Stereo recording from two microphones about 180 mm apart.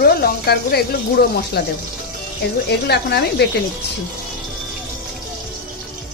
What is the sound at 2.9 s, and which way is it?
Speech, 65° left (ahead or behind).